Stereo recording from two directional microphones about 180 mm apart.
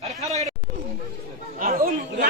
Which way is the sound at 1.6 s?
50° right (ahead or behind).